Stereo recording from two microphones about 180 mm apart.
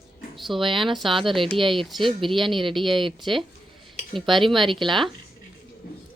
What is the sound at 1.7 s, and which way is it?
Speech, centre (ahead or behind).